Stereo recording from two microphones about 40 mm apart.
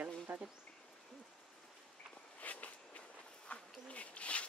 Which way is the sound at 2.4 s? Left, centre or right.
Left.